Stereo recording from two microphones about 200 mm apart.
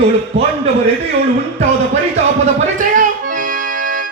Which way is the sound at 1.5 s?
35° right (ahead or behind).